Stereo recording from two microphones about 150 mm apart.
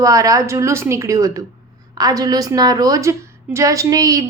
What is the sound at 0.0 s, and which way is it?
A woman's voice, 25° right (ahead or behind).